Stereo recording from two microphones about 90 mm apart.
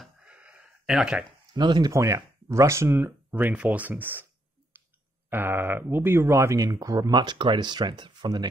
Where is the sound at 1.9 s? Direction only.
35° right (ahead or behind).